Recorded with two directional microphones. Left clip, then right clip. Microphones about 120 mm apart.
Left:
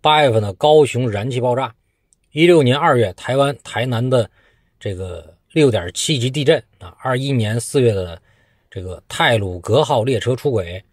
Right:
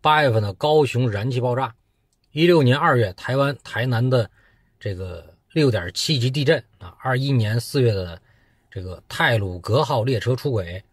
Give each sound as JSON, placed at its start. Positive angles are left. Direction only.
{"t": 0.0, "sound": "speech", "side_deg": 20}